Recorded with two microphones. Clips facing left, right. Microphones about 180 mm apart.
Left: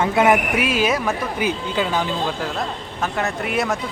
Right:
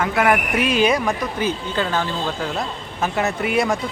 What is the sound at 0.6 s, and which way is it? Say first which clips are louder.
Speech: right 2 dB; 5° left (ahead or behind).